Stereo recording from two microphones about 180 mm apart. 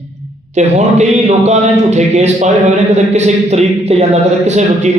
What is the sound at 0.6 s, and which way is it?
A man's voice, 40° right (ahead or behind).